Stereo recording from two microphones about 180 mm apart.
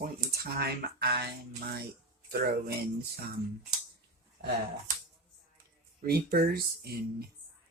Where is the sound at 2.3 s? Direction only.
60° right (ahead or behind).